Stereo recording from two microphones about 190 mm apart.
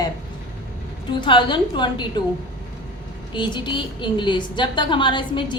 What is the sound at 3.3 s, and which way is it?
A woman's voice, 25° left (ahead or behind).